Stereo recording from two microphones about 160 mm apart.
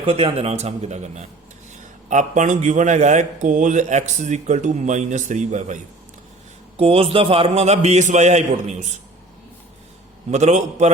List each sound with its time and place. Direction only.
0.0 s a man's voice: 35° right (ahead or behind)
6.7 s a man's voice: 35° right (ahead or behind)
10.3 s a man's voice: 45° right (ahead or behind)